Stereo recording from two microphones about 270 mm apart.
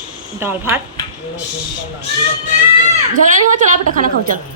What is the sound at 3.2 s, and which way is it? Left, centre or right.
A woman's voice, right.